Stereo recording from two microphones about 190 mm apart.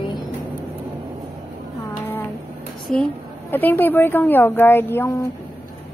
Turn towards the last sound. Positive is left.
turn(degrees=10)  # may be behind; listen again after turning